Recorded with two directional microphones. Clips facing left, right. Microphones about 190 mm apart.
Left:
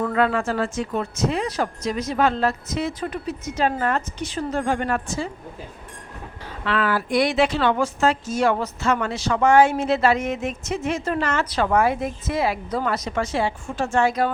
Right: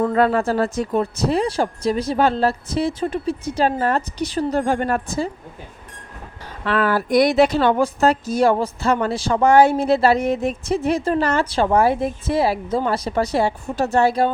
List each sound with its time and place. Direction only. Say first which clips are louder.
0.0 s speech: right 4 dB; 35° right (ahead or behind)
6.7 s speech: right 4 dB; 40° right (ahead or behind)